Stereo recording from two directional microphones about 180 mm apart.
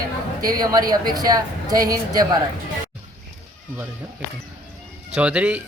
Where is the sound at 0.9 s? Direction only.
20° right (ahead or behind).